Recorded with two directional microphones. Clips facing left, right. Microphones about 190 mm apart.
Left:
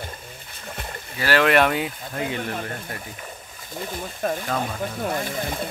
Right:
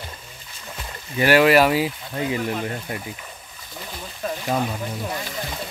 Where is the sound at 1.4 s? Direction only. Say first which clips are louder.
Even; 5° right (ahead or behind).